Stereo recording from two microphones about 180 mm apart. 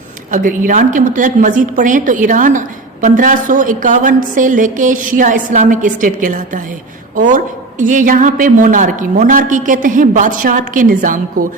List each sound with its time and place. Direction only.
0.3 s a woman's voice: 45° right (ahead or behind)